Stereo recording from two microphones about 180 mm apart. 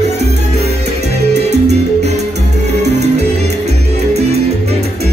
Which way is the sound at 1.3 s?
40° right (ahead or behind).